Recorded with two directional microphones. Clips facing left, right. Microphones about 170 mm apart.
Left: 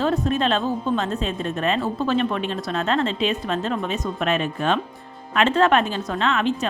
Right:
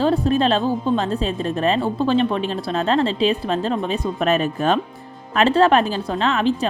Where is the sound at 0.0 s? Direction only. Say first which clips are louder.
Right 4 dB; 35° right (ahead or behind).